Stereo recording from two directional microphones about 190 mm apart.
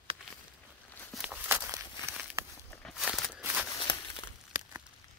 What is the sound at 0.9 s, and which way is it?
Walk, 10° left (ahead or behind).